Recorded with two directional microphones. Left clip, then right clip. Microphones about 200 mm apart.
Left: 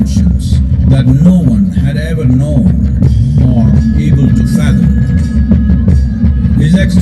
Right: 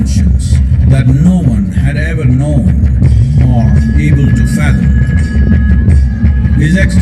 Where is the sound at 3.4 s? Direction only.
20° right (ahead or behind).